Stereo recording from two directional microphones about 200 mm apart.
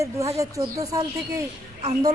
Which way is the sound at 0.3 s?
15° right (ahead or behind).